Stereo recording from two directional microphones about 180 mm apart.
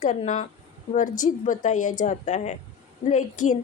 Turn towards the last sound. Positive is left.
turn(degrees=40)  # may be behind; listen again after turning